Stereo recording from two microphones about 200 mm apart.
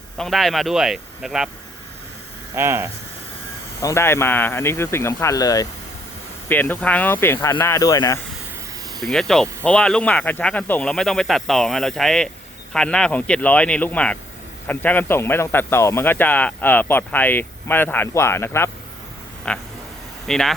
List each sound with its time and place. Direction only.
0.2 s speech: centre (ahead or behind)
2.6 s speech: 10° right (ahead or behind)
3.8 s speech: 15° left (ahead or behind)
9.0 s speech: centre (ahead or behind)